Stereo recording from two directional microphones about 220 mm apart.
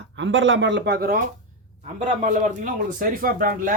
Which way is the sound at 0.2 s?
60° right (ahead or behind).